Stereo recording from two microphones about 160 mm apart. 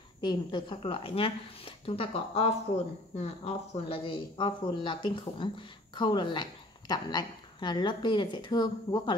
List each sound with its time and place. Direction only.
0.2 s a woman's voice: 25° left (ahead or behind)